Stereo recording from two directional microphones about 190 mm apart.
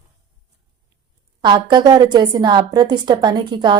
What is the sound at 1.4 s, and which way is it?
A woman's voice, 25° right (ahead or behind).